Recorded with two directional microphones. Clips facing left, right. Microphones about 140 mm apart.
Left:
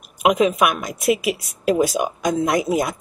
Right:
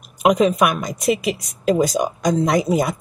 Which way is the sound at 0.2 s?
Centre (ahead or behind).